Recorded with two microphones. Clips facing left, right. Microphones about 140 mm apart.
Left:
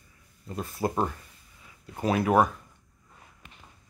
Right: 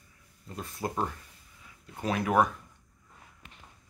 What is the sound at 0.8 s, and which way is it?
Speech, 40° left (ahead or behind).